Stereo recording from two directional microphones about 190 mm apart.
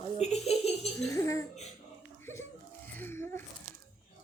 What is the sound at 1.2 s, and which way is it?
Speech, 15° left (ahead or behind).